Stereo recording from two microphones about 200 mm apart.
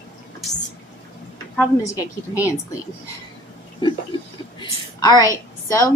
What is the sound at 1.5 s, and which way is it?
Speech, 15° left (ahead or behind).